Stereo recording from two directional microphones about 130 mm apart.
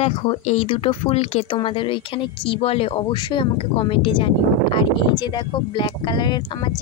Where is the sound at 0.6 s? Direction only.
40° left (ahead or behind).